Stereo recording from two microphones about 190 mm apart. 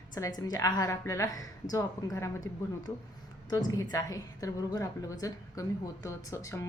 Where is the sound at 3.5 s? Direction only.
20° left (ahead or behind).